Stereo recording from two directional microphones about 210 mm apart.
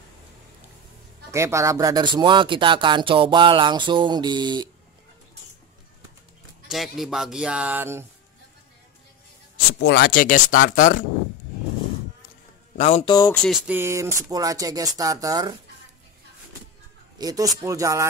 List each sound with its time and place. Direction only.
1.3 s speech: 15° right (ahead or behind)
6.7 s music: centre (ahead or behind)
9.8 s speech: 50° left (ahead or behind)
12.7 s speech: 30° left (ahead or behind)
13.1 s speech: 15° left (ahead or behind)
13.4 s speech: 5° right (ahead or behind)
17.2 s speech: 20° right (ahead or behind)